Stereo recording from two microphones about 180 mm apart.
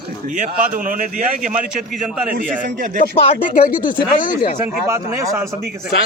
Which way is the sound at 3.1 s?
35° left (ahead or behind).